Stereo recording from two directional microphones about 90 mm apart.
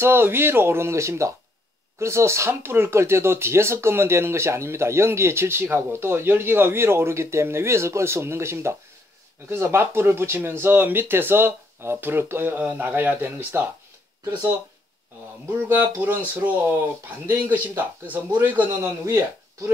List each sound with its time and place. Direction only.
0.0 s speech: 25° right (ahead or behind)
15.4 s speech: 20° right (ahead or behind)
17.3 s speech: 20° right (ahead or behind)